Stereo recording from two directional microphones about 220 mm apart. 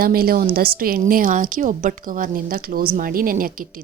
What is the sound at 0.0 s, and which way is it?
A woman's voice, 40° right (ahead or behind).